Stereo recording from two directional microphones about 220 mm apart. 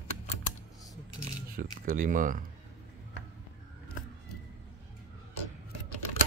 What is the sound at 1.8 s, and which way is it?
Speech, 40° right (ahead or behind).